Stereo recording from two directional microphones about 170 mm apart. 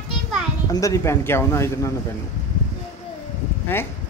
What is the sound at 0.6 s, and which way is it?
Speech, 20° left (ahead or behind).